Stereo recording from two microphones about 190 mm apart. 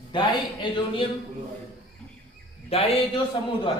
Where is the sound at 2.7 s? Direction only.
30° left (ahead or behind).